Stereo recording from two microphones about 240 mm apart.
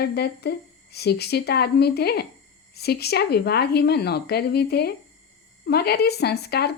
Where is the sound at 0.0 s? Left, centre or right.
Left.